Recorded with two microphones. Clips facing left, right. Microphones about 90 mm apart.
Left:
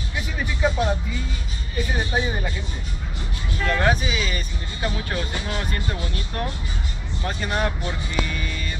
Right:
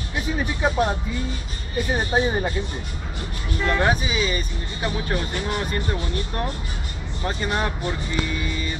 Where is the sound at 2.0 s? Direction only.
30° right (ahead or behind).